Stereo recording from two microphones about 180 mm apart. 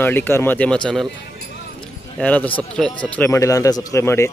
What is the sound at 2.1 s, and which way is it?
Speech, 10° left (ahead or behind).